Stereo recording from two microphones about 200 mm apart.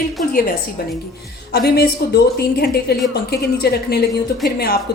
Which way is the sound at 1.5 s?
50° left (ahead or behind).